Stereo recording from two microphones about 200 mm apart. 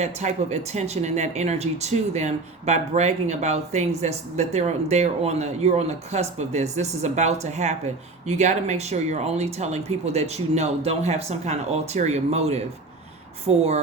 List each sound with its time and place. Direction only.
0.0 s speech: 35° right (ahead or behind)